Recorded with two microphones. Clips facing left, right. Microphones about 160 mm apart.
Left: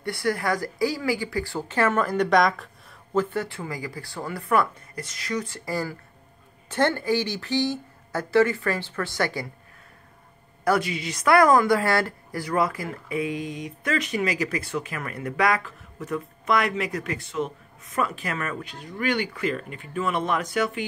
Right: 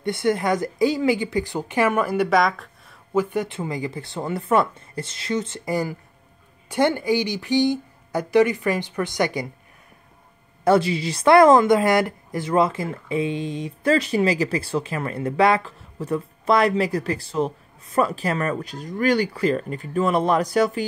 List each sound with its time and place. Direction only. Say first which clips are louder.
0.0 s speech: right 4 dB; 20° right (ahead or behind); by 3.0 s centre (ahead or behind)
3.1 s speech: right 3 dB; 15° right (ahead or behind)
10.6 s a woman's voice: right 5 dB; 30° right (ahead or behind)